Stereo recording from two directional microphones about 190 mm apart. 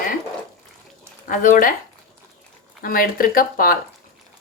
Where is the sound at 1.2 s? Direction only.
45° left (ahead or behind).